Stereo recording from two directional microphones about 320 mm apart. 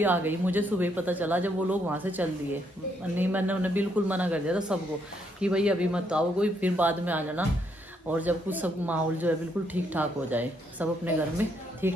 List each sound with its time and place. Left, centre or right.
0.0 s speech: centre